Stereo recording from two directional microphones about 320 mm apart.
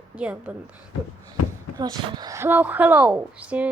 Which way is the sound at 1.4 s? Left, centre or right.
Left.